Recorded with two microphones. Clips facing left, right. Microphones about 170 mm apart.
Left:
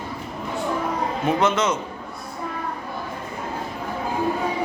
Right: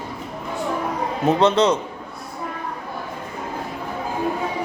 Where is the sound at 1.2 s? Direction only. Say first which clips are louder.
Right 5 dB; 35° right (ahead or behind).